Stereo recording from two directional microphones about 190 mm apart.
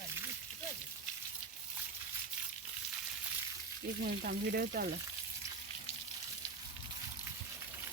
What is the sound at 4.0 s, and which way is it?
Speech, 55° right (ahead or behind).